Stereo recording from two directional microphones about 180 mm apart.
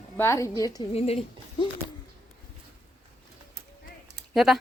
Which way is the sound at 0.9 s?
35° left (ahead or behind).